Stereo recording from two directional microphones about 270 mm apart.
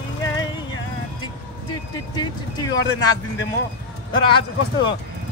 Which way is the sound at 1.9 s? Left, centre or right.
Centre.